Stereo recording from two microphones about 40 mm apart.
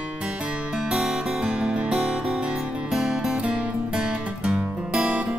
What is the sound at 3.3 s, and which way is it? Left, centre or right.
Music, right.